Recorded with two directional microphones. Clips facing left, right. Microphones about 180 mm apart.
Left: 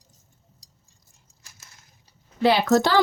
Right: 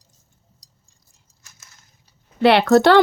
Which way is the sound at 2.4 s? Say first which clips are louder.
Right 5 dB; 70° right (ahead or behind).